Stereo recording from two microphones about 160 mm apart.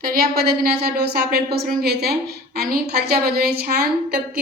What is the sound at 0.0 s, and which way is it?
A woman's voice, 65° right (ahead or behind).